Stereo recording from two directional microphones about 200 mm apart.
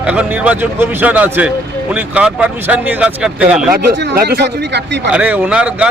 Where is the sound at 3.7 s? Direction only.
55° right (ahead or behind).